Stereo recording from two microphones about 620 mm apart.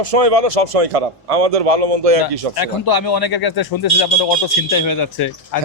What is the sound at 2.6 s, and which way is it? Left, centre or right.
A man's voice, left.